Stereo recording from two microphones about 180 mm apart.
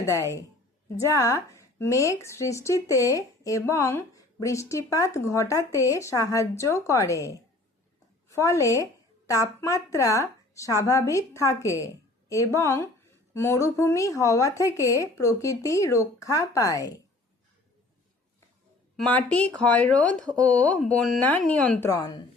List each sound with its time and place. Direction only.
0.0 s a woman's voice: 15° left (ahead or behind)
18.9 s a woman's voice: 10° left (ahead or behind)